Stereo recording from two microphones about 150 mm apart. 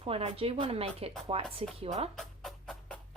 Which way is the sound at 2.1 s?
Centre (ahead or behind).